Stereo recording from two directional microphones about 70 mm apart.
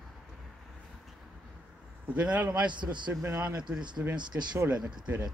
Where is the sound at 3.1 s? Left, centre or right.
Right.